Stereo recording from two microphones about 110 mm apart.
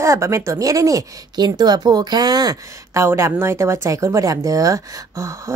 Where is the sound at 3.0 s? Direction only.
25° right (ahead or behind).